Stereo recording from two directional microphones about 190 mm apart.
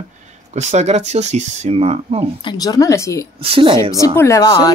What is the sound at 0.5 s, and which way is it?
Speech, 35° right (ahead or behind).